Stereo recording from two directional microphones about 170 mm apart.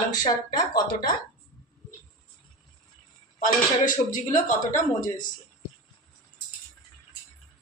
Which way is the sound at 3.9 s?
50° left (ahead or behind).